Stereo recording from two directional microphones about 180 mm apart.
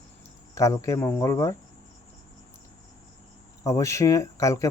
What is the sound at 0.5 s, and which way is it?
Speech, 15° left (ahead or behind).